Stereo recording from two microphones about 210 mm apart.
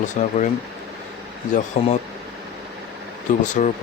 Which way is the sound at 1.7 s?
35° left (ahead or behind).